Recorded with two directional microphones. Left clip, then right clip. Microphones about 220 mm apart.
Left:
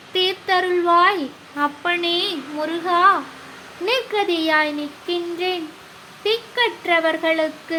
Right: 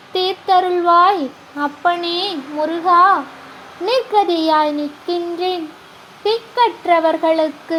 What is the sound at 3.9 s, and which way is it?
Speech, 10° right (ahead or behind).